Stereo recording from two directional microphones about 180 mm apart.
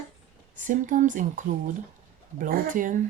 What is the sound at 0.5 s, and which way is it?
Speech, 45° right (ahead or behind).